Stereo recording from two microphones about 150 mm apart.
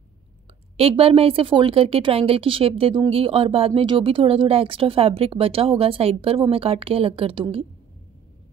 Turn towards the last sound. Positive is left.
turn(degrees=-35)  # may be behind; listen again after turning